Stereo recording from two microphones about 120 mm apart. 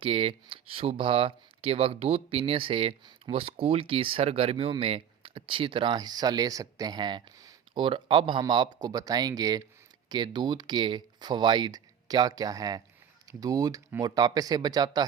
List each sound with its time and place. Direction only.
0.0 s speech: 50° right (ahead or behind)
7.8 s speech: 45° right (ahead or behind)